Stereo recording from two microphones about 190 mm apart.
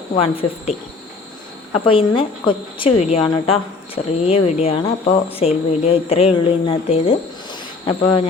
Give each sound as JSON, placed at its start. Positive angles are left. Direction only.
{"t": 1.8, "sound": "a woman's voice", "side_deg": 30}